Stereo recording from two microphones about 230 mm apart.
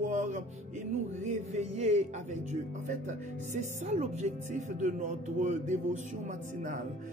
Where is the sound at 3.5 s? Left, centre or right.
Right.